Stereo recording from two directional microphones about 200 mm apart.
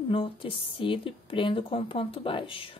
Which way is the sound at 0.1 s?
25° left (ahead or behind).